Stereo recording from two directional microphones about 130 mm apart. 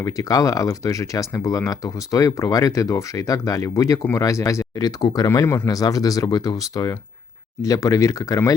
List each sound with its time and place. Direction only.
0.0 s speech: 25° left (ahead or behind)